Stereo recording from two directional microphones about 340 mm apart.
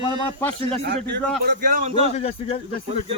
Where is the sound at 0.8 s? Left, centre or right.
Right.